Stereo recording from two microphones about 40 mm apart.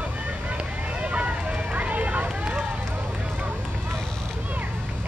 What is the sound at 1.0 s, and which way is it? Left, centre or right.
Run, right.